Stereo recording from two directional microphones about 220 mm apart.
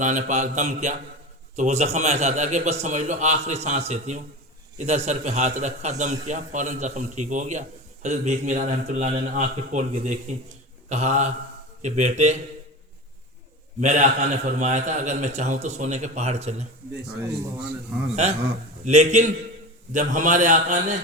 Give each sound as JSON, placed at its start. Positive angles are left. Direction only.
{"t": 0.0, "sound": "a man's voice", "side_deg": -35}
{"t": 10.8, "sound": "mantra", "side_deg": -30}
{"t": 11.8, "sound": "a man's voice", "side_deg": -30}
{"t": 13.8, "sound": "a man's voice", "side_deg": -35}
{"t": 18.2, "sound": "a man's voice", "side_deg": -30}